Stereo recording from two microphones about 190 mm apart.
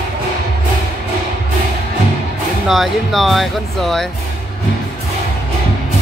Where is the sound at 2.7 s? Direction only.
Centre (ahead or behind).